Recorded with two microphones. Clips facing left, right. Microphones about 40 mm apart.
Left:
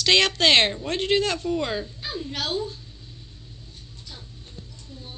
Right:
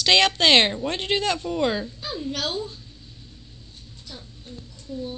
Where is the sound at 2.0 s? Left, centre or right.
Centre.